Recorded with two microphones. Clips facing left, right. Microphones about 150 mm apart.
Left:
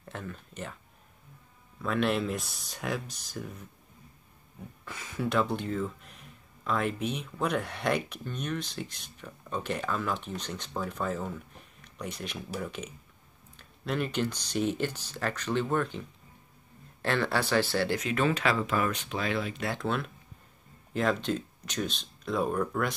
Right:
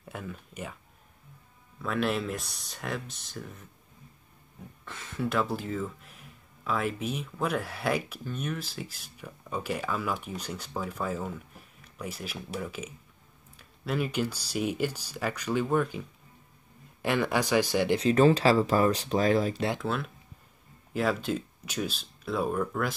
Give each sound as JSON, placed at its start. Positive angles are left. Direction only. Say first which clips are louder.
{"t": 0.0, "sound": "speech", "louder": "right 1 dB", "side_deg": -10}
{"t": 1.8, "sound": "speech", "louder": "left 1 dB", "side_deg": 0}
{"t": 4.8, "sound": "speech", "louder": "even", "side_deg": 0}
{"t": 17.0, "sound": "speech", "louder": "right 2 dB", "side_deg": -15}
{"t": 17.9, "sound": "speech", "louder": "right 7 dB", "side_deg": -35}
{"t": 19.8, "sound": "speech", "louder": "even", "side_deg": 0}